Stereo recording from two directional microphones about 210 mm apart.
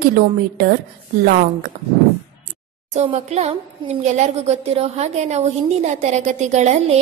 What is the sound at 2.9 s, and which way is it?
A woman's voice, 35° right (ahead or behind).